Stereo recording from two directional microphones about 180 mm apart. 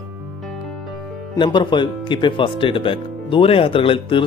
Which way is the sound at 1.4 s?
25° left (ahead or behind).